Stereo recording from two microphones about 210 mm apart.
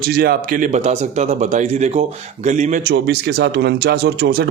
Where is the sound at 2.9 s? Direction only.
50° right (ahead or behind).